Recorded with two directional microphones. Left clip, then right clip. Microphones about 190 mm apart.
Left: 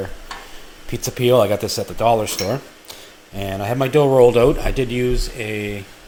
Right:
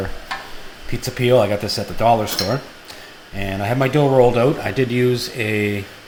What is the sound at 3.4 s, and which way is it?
Speech, 40° left (ahead or behind).